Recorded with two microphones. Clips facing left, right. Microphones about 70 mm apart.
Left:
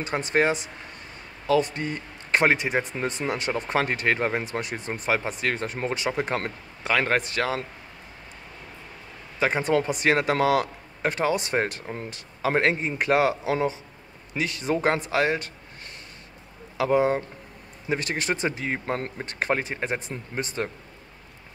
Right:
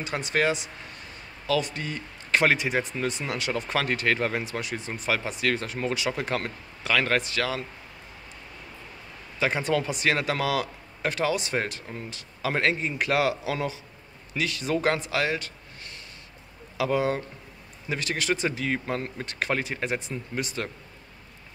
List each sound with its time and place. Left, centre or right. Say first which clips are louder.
0.0 s speech: left 2 dB; left
4.5 s speech: left 2 dB; left
5.3 s speech: even; left
9.7 s speech: left 3 dB; left
16.7 s speech: left 4 dB; left